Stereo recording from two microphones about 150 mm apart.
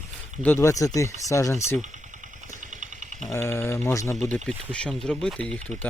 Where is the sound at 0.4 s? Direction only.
15° left (ahead or behind).